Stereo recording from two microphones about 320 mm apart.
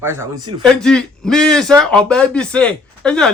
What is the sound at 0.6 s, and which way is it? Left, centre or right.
A man's voice, centre.